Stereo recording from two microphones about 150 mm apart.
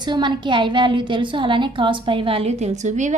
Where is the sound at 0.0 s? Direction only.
30° right (ahead or behind).